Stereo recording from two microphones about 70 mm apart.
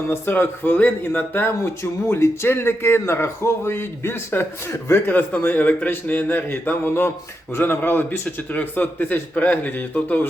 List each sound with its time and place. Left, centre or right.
0.1 s a man's voice: left
5.0 s speech: left